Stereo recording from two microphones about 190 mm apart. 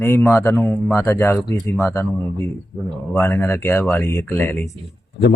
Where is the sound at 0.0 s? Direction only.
15° left (ahead or behind).